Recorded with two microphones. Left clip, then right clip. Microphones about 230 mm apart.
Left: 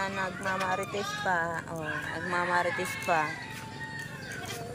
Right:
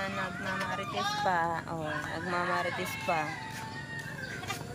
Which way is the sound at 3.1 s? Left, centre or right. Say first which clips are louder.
Left 4 dB; centre.